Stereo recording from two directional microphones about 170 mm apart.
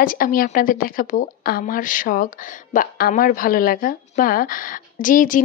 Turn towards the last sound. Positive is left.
turn(degrees=55)  # may be behind; listen again after turning